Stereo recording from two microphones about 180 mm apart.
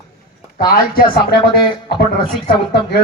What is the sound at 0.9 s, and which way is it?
A woman's voice, 65° left (ahead or behind).